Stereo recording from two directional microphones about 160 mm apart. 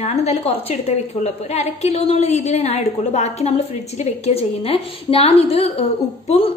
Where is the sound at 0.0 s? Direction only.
40° left (ahead or behind).